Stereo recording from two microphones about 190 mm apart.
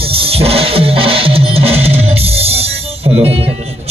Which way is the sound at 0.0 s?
30° right (ahead or behind).